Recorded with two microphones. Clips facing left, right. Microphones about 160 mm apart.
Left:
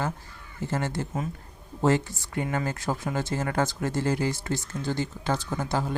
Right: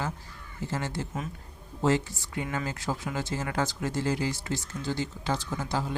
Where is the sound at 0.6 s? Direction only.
55° left (ahead or behind).